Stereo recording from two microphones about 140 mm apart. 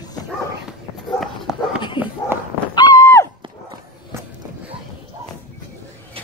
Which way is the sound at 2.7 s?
30° left (ahead or behind).